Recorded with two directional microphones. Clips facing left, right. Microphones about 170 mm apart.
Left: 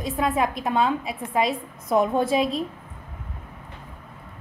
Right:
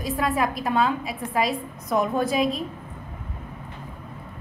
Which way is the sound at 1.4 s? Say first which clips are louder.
Left 1 dB; 25° left (ahead or behind).